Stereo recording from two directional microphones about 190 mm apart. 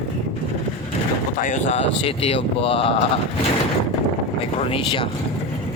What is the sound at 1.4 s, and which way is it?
Speech, 45° left (ahead or behind).